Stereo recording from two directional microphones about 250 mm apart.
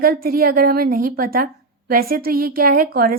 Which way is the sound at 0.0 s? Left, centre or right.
Right.